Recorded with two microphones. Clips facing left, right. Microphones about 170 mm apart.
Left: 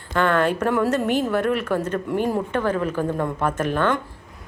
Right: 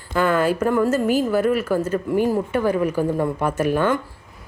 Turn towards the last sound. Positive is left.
turn(degrees=-10)  # may be behind; listen again after turning